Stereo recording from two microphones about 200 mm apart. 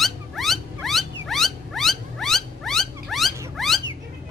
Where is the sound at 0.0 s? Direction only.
Centre (ahead or behind).